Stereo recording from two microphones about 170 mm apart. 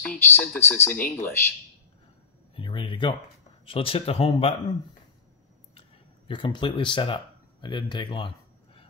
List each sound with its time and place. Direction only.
0.0 s speech: 5° left (ahead or behind)
2.5 s speech: 30° left (ahead or behind)
5.8 s a sound: 30° left (ahead or behind)
7.6 s speech: 25° left (ahead or behind)